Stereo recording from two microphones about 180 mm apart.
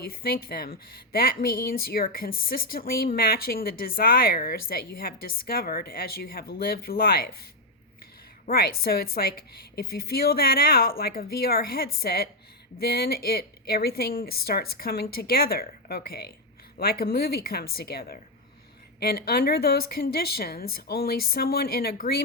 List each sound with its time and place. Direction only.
0.0 s a woman's voice: 55° left (ahead or behind)
8.4 s a woman's voice: 55° left (ahead or behind)